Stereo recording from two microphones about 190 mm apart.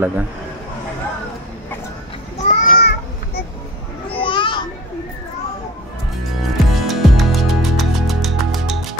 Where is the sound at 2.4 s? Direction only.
50° left (ahead or behind).